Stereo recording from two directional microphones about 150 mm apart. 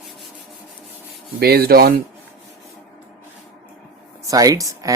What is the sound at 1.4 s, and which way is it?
Speech, 90° right.